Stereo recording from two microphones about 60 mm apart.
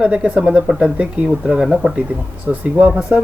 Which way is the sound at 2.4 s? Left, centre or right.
Right.